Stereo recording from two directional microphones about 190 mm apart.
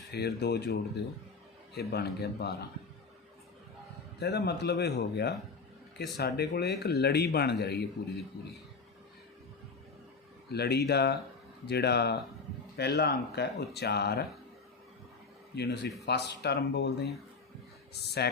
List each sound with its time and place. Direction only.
0.1 s speech: 60° left (ahead or behind)
4.2 s speech: 60° left (ahead or behind)
10.5 s speech: 60° left (ahead or behind)
15.5 s speech: 60° left (ahead or behind)